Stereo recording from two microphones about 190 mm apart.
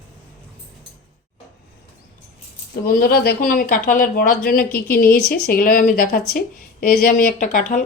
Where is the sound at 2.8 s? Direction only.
55° left (ahead or behind).